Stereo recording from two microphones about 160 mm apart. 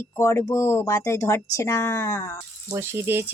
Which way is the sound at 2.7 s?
15° right (ahead or behind).